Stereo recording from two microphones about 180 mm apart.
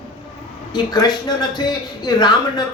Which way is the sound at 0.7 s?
20° left (ahead or behind).